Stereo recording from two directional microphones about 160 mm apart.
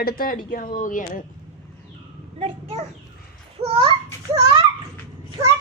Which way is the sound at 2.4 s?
40° right (ahead or behind).